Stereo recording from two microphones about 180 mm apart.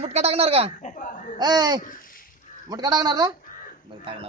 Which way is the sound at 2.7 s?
20° right (ahead or behind).